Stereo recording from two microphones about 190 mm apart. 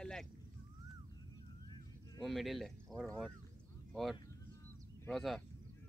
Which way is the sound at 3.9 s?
Centre (ahead or behind).